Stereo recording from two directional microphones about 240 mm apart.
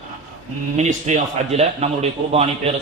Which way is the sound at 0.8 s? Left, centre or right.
Right.